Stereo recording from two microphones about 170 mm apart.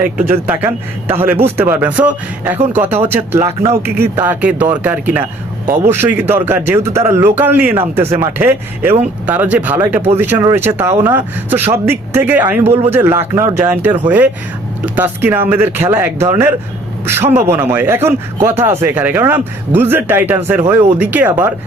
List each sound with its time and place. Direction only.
0.2 s a man's voice: 10° right (ahead or behind)